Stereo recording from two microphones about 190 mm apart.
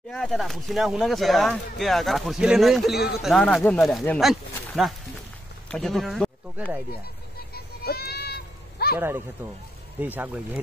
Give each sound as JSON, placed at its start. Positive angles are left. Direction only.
{"t": 0.1, "sound": "speech", "side_deg": 0}
{"t": 7.5, "sound": "a sound", "side_deg": 55}
{"t": 9.9, "sound": "speech", "side_deg": -10}